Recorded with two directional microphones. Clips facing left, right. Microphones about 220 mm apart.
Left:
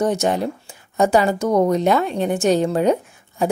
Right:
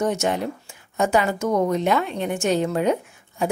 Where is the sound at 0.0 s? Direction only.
35° left (ahead or behind).